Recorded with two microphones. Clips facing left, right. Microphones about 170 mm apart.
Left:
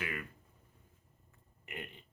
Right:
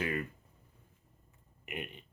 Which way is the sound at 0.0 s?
35° right (ahead or behind).